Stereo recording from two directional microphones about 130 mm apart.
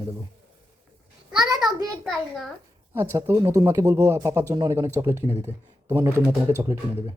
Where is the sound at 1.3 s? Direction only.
30° right (ahead or behind).